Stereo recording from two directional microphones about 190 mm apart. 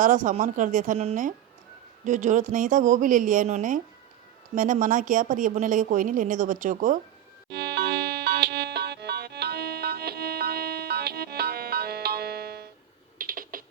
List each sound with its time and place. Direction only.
0.0 s speech: 45° right (ahead or behind)
7.5 s music: 60° right (ahead or behind)
13.1 s typing: 45° right (ahead or behind)